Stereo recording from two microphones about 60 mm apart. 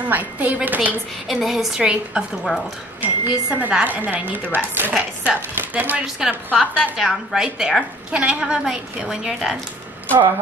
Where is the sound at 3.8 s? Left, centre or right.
Right.